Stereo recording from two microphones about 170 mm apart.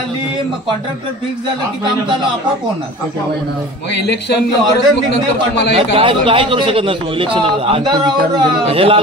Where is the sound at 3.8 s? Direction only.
80° left.